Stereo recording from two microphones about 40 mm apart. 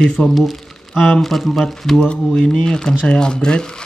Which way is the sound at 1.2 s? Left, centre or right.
Centre.